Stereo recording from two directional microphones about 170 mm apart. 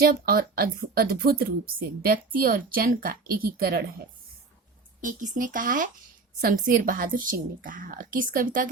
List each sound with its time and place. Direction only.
0.0 s a woman's voice: 60° right (ahead or behind)
4.9 s a woman's voice: 50° right (ahead or behind)